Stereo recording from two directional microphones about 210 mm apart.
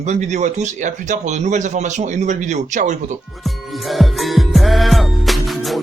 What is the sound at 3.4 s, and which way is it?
Music, centre (ahead or behind).